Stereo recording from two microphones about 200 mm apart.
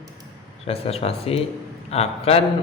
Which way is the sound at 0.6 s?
30° left (ahead or behind).